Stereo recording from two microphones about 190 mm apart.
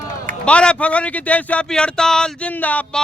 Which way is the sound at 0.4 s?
5° left (ahead or behind).